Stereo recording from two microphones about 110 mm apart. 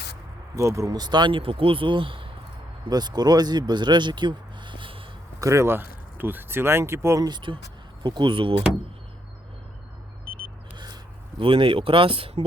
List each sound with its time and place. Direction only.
0.5 s speech: 30° right (ahead or behind); by 2.2 s 50° right (ahead or behind)
2.9 s speech: 40° right (ahead or behind)
5.4 s speech: 25° right (ahead or behind)
7.3 s speech: 45° right (ahead or behind)
11.3 s speech: 50° right (ahead or behind)